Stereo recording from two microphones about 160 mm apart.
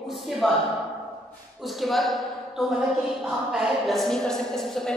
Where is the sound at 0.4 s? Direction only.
5° left (ahead or behind).